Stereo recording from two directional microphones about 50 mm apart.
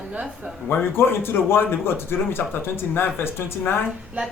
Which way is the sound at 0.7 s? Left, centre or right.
Left.